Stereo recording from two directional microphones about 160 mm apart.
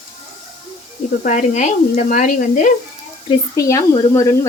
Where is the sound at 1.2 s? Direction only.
50° left (ahead or behind).